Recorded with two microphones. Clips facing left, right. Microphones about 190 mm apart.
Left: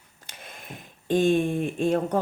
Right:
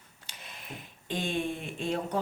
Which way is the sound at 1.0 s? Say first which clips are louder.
Left 11 dB; 45° left (ahead or behind).